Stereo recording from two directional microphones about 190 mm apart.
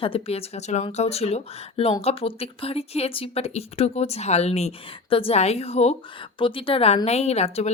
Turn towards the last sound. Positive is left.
turn(degrees=35)  # may be behind; listen again after turning